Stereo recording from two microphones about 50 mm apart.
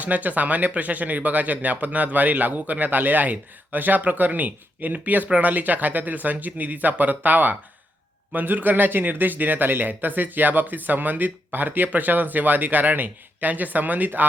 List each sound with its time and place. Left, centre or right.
0.0 s speech: right